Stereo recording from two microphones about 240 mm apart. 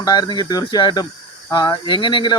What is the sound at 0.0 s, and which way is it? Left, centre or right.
Speech, centre.